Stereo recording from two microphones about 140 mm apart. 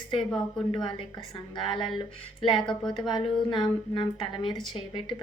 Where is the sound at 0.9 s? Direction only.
30° left (ahead or behind).